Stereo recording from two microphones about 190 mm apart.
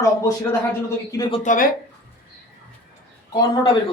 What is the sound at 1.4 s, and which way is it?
Speech, 40° left (ahead or behind).